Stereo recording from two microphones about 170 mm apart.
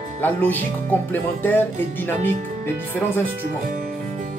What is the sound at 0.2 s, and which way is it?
Speech, 10° left (ahead or behind).